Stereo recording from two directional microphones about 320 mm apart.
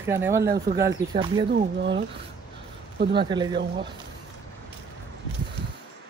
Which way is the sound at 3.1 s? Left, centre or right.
Centre.